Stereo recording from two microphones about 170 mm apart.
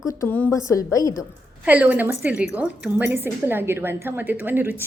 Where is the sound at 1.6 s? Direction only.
10° right (ahead or behind).